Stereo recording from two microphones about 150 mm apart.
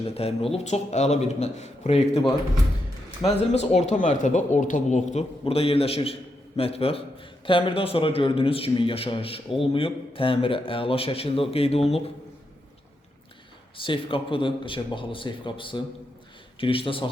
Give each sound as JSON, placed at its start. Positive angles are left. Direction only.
{"t": 0.0, "sound": "speech", "side_deg": 40}
{"t": 3.5, "sound": "a man's voice", "side_deg": 45}
{"t": 13.7, "sound": "a man's voice", "side_deg": 35}